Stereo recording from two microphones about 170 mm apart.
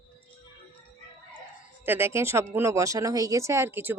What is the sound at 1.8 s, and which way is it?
Speech, 15° right (ahead or behind).